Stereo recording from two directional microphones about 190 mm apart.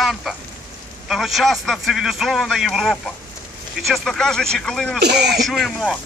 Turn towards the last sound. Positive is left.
turn(degrees=0)  # may be behind; listen again after turning